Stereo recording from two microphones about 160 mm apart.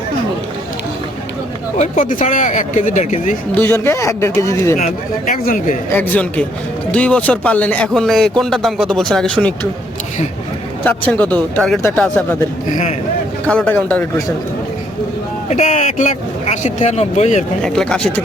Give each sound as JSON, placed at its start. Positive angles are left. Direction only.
{"t": 1.8, "sound": "speech", "side_deg": 50}
{"t": 3.5, "sound": "speech", "side_deg": 15}
{"t": 4.8, "sound": "speech", "side_deg": 60}
{"t": 5.9, "sound": "speech", "side_deg": 10}
{"t": 10.8, "sound": "speech", "side_deg": 10}
{"t": 13.5, "sound": "speech", "side_deg": 10}
{"t": 15.4, "sound": "speech", "side_deg": 45}
{"t": 17.6, "sound": "speech", "side_deg": 5}